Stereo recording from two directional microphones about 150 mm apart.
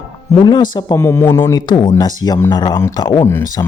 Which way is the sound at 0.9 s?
15° left (ahead or behind).